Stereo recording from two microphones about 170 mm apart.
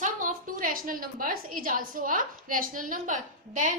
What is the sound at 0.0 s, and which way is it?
A woman's voice, 50° right (ahead or behind).